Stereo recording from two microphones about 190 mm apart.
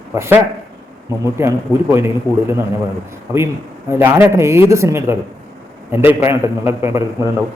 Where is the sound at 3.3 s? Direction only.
15° right (ahead or behind).